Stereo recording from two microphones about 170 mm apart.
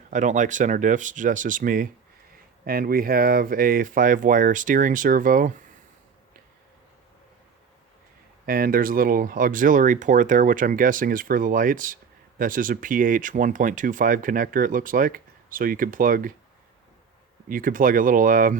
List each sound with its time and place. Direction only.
0.1 s speech: 45° right (ahead or behind)
8.4 s speech: 55° right (ahead or behind)
17.5 s speech: 55° right (ahead or behind)